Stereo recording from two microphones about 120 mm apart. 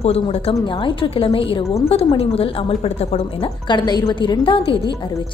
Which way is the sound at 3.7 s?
40° left (ahead or behind).